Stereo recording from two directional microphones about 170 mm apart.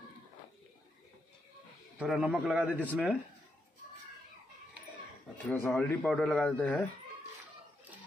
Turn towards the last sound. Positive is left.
turn(degrees=10)  # may be behind; listen again after turning